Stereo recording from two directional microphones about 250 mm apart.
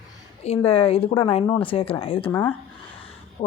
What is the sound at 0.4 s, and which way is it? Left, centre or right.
A woman's voice, left.